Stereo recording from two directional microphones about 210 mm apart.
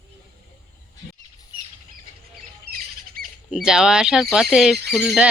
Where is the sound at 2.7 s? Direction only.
45° right (ahead or behind).